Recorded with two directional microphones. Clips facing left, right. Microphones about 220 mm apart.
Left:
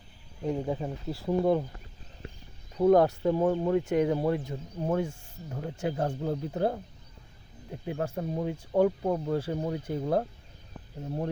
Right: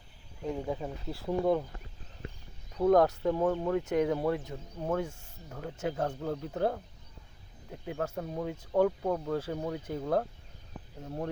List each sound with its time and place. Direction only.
0.5 s speech: 15° left (ahead or behind)
2.7 s speech: 10° left (ahead or behind)
7.9 s speech: 10° left (ahead or behind)